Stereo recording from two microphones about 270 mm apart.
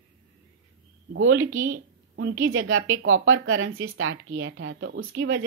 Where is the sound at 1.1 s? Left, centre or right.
Right.